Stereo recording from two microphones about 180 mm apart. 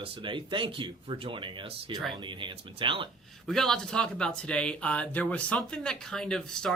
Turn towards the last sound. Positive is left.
turn(degrees=5)  # may be behind; listen again after turning